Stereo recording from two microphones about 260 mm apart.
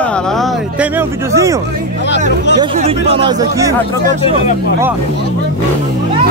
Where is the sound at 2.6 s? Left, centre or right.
Right.